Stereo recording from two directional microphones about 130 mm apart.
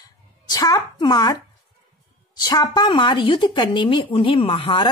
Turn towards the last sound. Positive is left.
turn(degrees=40)  # may be behind; listen again after turning